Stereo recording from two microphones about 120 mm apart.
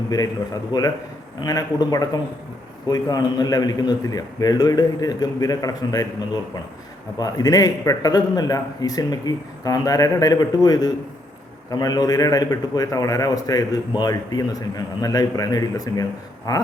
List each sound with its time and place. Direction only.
0.1 s a man's voice: 35° left (ahead or behind)